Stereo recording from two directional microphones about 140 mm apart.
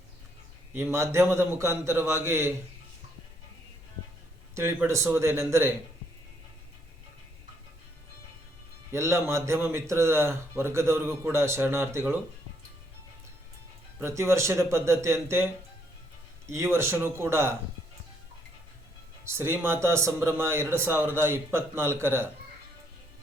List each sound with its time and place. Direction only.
0.7 s a man's voice: 20° right (ahead or behind)
4.5 s speech: 15° right (ahead or behind)
8.9 s a man's voice: 20° right (ahead or behind)
14.0 s a man's voice: 20° right (ahead or behind)
16.5 s speech: 20° right (ahead or behind)
19.2 s speech: 15° right (ahead or behind)